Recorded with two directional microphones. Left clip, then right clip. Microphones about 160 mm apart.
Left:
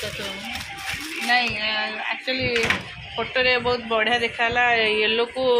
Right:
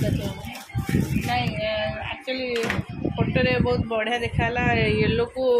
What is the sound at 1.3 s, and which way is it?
A man's voice, centre (ahead or behind).